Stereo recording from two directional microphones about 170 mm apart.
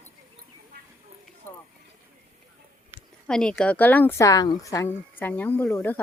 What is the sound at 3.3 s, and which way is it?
Speech, 5° left (ahead or behind).